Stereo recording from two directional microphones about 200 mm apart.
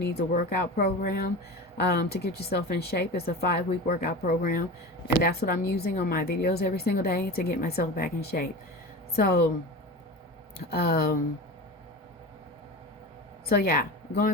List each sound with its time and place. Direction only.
0.0 s a woman's voice: 55° left (ahead or behind)
10.7 s a woman's voice: 50° left (ahead or behind)
13.5 s speech: 50° left (ahead or behind)